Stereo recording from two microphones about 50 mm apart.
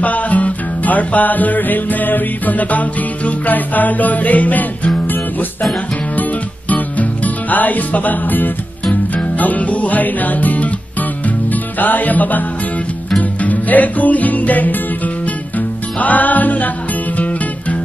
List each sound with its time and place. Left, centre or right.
0.0 s music: left
6.7 s music: left